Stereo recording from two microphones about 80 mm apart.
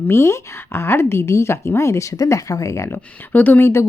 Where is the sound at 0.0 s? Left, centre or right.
Left.